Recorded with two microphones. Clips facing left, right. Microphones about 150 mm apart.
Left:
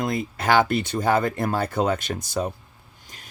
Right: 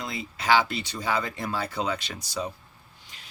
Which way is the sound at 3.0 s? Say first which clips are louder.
Left 5 dB; 45° left (ahead or behind).